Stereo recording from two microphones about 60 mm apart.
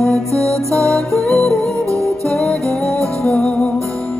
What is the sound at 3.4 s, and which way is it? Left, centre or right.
Music, left.